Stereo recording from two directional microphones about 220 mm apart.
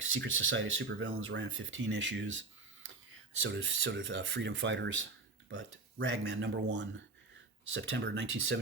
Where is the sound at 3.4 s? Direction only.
60° right (ahead or behind).